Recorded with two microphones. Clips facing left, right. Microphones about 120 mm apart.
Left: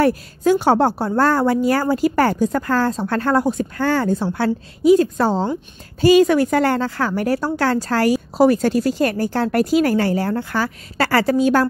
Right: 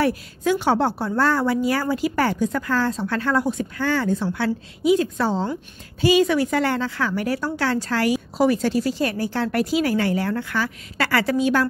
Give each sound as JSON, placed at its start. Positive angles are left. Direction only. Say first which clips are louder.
{"t": 0.0, "sound": "a woman's voice", "louder": "left 5 dB", "side_deg": 40}